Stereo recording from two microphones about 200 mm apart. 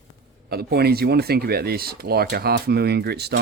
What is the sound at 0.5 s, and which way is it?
Speech, 50° right (ahead or behind).